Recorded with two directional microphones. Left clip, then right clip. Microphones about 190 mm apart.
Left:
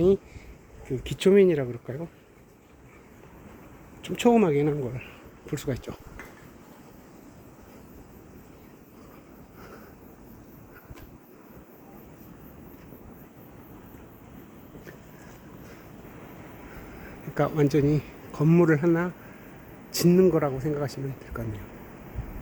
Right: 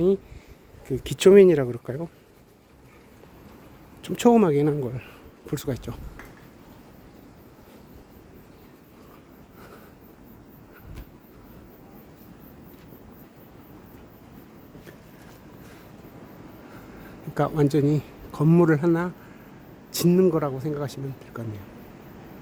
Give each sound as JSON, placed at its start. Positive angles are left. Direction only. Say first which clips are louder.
{"t": 0.9, "sound": "speech", "louder": "right 6 dB", "side_deg": -40}
{"t": 4.0, "sound": "speech", "louder": "right 3 dB", "side_deg": -35}
{"t": 17.3, "sound": "speech", "louder": "right 1 dB", "side_deg": -10}